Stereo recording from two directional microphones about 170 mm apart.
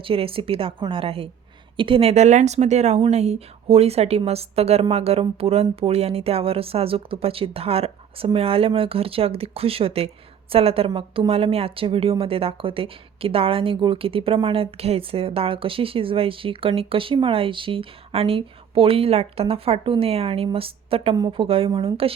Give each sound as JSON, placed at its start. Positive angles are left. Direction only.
{"t": 0.0, "sound": "a woman's voice", "side_deg": -35}